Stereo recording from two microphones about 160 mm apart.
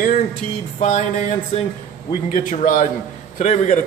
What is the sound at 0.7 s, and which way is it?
A man's voice, 50° left (ahead or behind).